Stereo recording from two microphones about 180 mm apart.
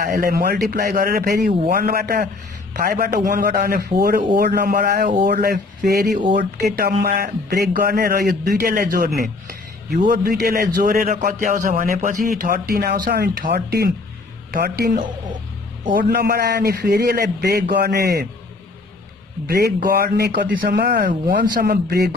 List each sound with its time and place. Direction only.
0.0 s a man's voice: 55° right (ahead or behind)
6.8 s a man's voice: 45° right (ahead or behind); by 18.2 s 60° right (ahead or behind)
19.4 s a man's voice: 55° right (ahead or behind)
21.0 s a man's voice: 50° right (ahead or behind)